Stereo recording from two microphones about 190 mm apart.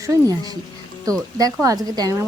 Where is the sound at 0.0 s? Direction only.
20° right (ahead or behind).